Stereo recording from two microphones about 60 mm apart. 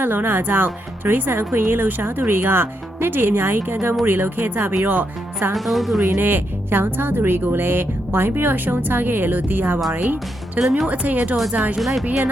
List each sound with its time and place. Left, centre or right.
0.0 s speech: right
5.5 s a woman's voice: centre
6.1 s speech: right
10.6 s a woman's voice: centre
10.8 s speech: right
11.8 s a woman's voice: centre